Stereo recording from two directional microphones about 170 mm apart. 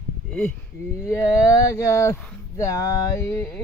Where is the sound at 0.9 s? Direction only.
15° left (ahead or behind).